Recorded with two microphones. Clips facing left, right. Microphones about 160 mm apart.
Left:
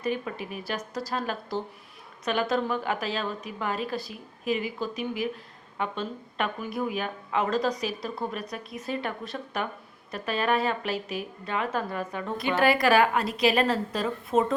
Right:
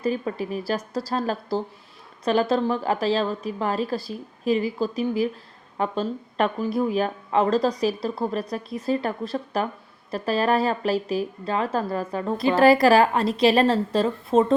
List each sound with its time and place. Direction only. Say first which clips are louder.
0.0 s speech: right 5 dB; 35° right (ahead or behind)